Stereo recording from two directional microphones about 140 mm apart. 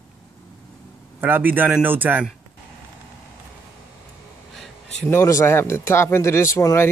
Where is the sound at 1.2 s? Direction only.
15° right (ahead or behind).